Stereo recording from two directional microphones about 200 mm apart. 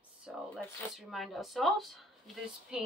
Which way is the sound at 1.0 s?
Centre (ahead or behind).